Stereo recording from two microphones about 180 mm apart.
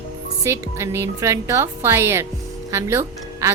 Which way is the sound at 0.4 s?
15° right (ahead or behind).